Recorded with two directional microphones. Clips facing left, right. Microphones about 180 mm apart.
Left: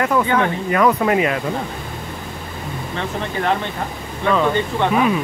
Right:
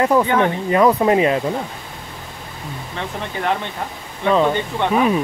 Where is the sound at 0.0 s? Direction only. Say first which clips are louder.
Right 2 dB; 30° right (ahead or behind).